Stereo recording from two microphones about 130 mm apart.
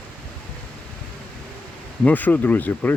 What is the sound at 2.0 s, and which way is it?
Speech, 15° left (ahead or behind).